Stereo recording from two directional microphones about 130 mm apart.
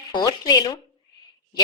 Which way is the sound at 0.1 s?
30° left (ahead or behind).